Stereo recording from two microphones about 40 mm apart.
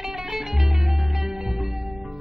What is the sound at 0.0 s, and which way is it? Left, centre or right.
Music, centre.